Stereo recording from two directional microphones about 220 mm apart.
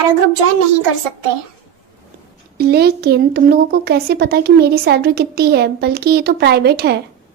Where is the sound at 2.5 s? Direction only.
45° right (ahead or behind).